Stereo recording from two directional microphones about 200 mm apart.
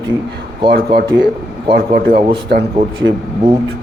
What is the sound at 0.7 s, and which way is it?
Speech, 50° right (ahead or behind).